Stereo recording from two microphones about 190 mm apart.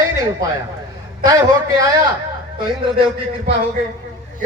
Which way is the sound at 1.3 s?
20° right (ahead or behind).